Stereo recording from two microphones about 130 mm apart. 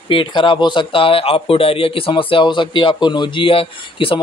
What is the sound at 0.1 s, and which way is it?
Speech, 40° left (ahead or behind).